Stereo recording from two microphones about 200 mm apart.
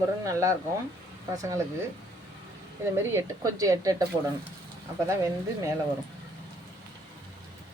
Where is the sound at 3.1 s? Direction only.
15° right (ahead or behind).